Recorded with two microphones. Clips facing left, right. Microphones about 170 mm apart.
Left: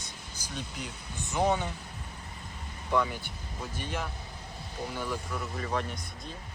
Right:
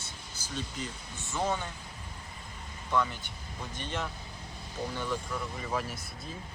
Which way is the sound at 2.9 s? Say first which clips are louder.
Left 2 dB; 10° left (ahead or behind).